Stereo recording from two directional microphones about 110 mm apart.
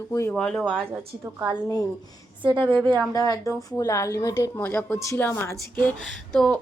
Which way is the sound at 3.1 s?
35° left (ahead or behind).